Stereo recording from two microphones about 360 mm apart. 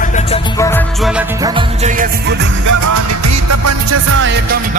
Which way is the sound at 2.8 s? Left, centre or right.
Right.